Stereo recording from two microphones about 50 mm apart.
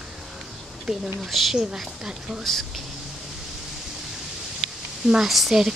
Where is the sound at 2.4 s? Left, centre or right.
Centre.